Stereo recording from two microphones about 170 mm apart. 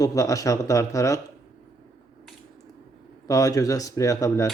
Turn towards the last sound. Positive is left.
turn(degrees=20)  # may be behind; listen again after turning